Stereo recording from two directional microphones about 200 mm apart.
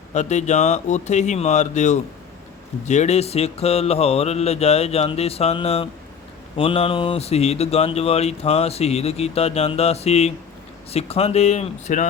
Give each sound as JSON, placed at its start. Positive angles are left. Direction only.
{"t": 0.1, "sound": "speech", "side_deg": 35}